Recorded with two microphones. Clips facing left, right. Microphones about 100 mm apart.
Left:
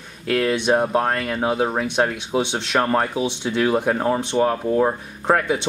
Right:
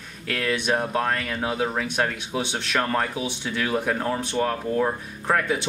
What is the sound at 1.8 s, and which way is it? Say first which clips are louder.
Speech: left 5 dB; 20° left (ahead or behind).